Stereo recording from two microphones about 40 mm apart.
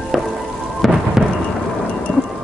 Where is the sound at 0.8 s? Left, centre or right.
Centre.